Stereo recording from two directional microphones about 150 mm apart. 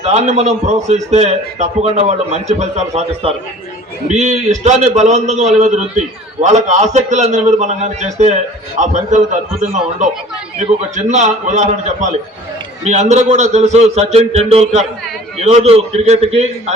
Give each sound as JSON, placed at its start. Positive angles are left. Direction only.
{"t": 0.0, "sound": "a man's voice", "side_deg": -50}